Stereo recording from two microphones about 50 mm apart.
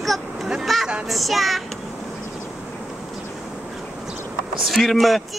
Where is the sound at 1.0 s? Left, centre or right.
Centre.